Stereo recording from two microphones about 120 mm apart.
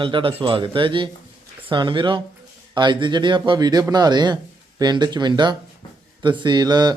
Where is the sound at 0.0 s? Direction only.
45° right (ahead or behind).